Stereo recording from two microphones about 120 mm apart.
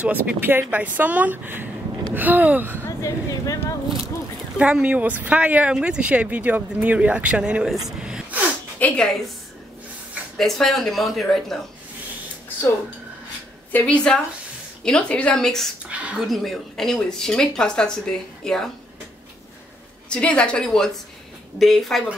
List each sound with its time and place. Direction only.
0.0 s speech: 10° right (ahead or behind)
3.0 s speech: 25° left (ahead or behind)
4.6 s speech: 10° right (ahead or behind)
7.8 s gasp: 5° right (ahead or behind)
8.7 s speech: 10° left (ahead or behind)
10.3 s speech: centre (ahead or behind)
13.7 s a woman's voice: 10° left (ahead or behind)
15.9 s speech: 10° right (ahead or behind)
16.3 s speech: centre (ahead or behind)
20.1 s a woman's voice: 10° left (ahead or behind)